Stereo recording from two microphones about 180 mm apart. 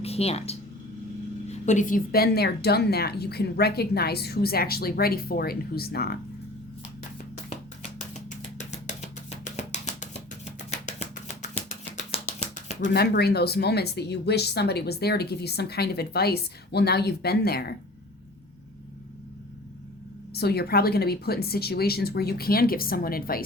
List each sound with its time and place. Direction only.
0.0 s speech: 35° left (ahead or behind); by 6.1 s 60° left (ahead or behind)
8.3 s music: 40° left (ahead or behind)
12.8 s speech: 65° left (ahead or behind)
20.3 s speech: 60° left (ahead or behind)